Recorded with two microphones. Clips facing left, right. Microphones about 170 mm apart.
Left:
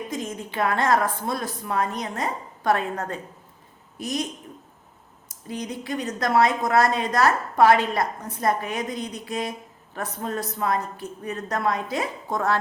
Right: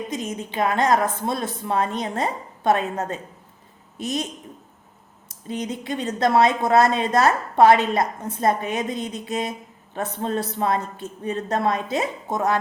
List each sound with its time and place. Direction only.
0.1 s a woman's voice: 20° right (ahead or behind)
5.3 s a woman's voice: 25° right (ahead or behind)